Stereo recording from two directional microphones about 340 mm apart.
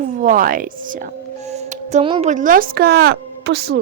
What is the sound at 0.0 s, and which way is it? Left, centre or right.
Speech, right.